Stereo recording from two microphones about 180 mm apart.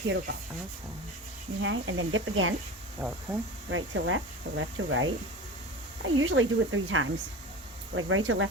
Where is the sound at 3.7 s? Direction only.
90° right.